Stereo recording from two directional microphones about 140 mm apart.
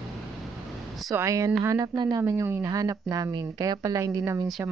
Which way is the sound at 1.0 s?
25° right (ahead or behind).